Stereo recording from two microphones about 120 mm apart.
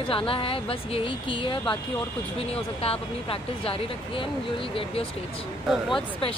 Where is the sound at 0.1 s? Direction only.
50° left (ahead or behind).